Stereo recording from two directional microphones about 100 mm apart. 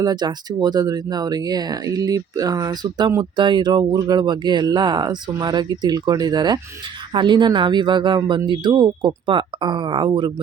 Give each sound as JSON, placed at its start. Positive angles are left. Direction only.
{"t": 0.0, "sound": "speech", "side_deg": -45}